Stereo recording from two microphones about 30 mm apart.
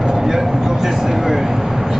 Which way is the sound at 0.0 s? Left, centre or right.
Centre.